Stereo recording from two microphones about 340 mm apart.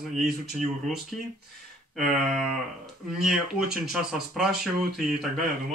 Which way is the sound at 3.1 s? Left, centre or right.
Centre.